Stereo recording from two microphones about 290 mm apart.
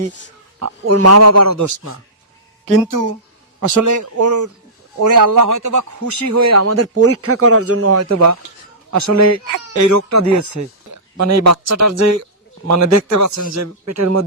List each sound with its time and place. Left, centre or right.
0.6 s a man's voice: right